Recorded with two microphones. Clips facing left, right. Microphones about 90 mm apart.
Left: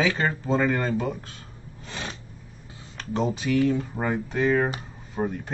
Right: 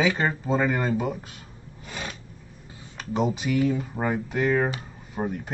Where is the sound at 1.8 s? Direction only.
5° right (ahead or behind).